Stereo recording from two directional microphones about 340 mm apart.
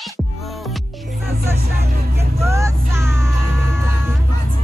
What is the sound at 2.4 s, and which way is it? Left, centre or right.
Music, centre.